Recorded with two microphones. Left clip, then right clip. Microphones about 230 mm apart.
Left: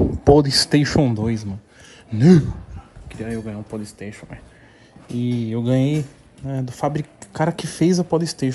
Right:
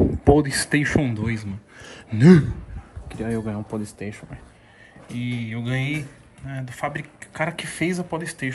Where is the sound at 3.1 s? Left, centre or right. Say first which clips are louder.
Right 1 dB; centre.